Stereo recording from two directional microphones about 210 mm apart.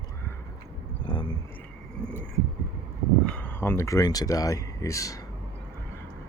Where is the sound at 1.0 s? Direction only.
20° left (ahead or behind).